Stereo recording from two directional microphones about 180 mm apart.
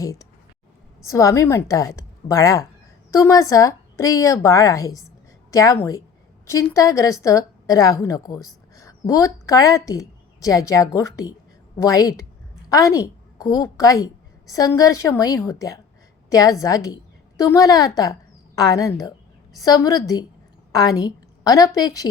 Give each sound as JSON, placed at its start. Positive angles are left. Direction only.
{"t": 0.0, "sound": "a woman's voice", "side_deg": 20}